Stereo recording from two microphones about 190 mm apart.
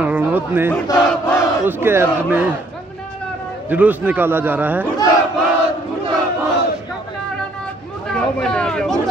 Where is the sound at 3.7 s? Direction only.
10° right (ahead or behind).